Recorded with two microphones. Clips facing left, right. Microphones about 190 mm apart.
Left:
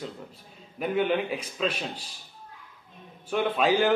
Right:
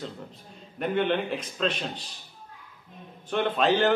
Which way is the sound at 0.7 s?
5° left (ahead or behind).